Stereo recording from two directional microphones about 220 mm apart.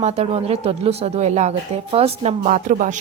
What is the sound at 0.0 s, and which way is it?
Speech, 30° right (ahead or behind).